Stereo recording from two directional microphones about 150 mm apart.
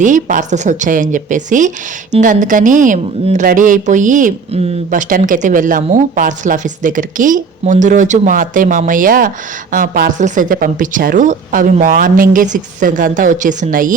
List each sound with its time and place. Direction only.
0.0 s speech: 55° right (ahead or behind)